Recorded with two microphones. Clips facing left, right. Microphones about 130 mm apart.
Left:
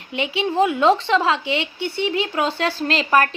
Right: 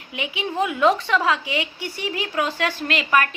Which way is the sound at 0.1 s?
30° left (ahead or behind).